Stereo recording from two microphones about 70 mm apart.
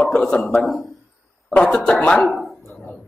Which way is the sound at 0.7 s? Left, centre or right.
Centre.